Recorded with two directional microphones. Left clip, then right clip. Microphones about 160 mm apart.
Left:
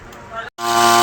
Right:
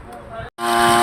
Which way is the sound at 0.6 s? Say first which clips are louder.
Left 2 dB; 10° right (ahead or behind).